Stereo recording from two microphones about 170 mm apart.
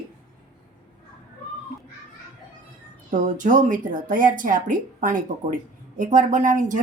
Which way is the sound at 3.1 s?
50° right (ahead or behind).